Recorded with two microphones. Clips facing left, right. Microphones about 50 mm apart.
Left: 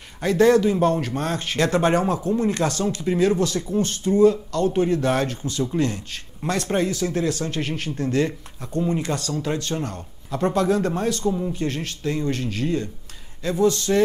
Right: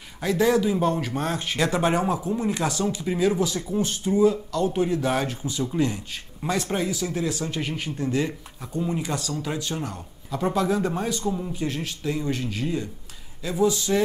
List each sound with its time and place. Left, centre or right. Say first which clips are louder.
0.2 s a man's voice: left 4 dB; centre
1.0 s speech: left 1 dB; centre
9.3 s a man's voice: left 4 dB; centre
11.2 s a man's voice: left 4 dB; centre
11.5 s speech: left 2 dB; centre